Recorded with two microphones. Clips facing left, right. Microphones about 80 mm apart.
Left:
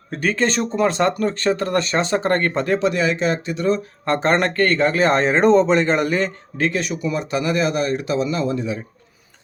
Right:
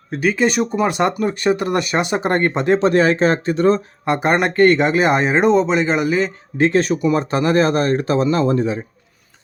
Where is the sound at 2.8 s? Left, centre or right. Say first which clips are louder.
Right 5 dB; right.